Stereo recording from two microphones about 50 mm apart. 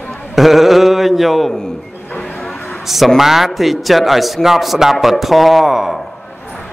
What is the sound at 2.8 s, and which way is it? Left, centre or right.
A man's voice, centre.